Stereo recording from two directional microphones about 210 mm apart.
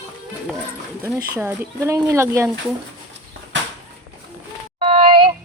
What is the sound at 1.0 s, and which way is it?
Speech, 10° right (ahead or behind).